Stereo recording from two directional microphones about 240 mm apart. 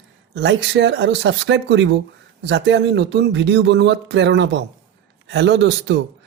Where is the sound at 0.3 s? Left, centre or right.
Right.